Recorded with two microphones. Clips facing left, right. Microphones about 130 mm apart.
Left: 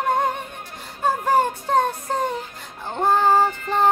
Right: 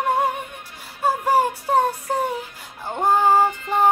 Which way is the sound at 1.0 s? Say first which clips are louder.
Even; 10° right (ahead or behind).